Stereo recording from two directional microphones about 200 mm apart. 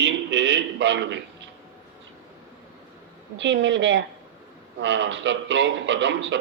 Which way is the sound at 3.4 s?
65° right (ahead or behind).